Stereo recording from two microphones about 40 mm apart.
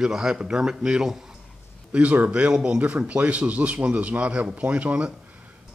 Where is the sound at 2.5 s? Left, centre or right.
Right.